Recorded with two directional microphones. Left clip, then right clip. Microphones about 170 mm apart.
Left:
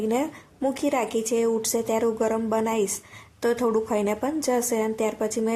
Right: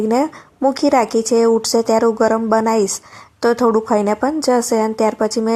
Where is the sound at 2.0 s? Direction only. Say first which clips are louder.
Right 9 dB; 30° right (ahead or behind).